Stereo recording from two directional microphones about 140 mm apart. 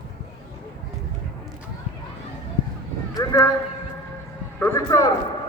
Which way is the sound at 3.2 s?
25° left (ahead or behind).